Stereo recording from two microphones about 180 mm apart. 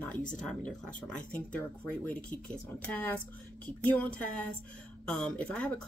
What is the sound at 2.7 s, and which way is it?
Speech, 10° left (ahead or behind).